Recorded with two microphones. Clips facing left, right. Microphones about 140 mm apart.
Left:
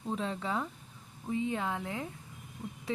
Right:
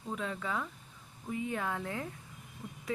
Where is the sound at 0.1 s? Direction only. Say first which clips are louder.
Left 2 dB; 30° left (ahead or behind).